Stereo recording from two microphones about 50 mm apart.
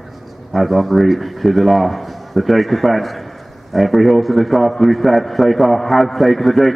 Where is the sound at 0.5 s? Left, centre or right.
Centre.